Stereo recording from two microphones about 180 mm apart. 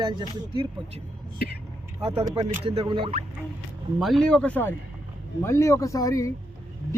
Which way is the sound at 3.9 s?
Centre (ahead or behind).